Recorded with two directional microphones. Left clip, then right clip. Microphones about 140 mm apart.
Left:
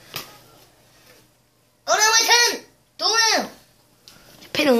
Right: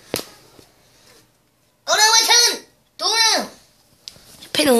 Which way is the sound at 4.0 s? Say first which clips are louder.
Right 6 dB; 15° right (ahead or behind).